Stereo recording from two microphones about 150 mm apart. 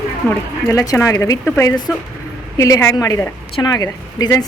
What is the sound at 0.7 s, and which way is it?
A woman's voice, 20° left (ahead or behind).